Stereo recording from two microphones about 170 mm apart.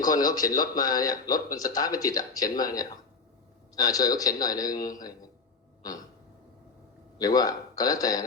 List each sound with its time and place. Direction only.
0.0 s speech: 20° left (ahead or behind)
7.2 s speech: 20° left (ahead or behind)